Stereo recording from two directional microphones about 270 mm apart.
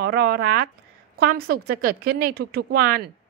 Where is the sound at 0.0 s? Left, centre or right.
Right.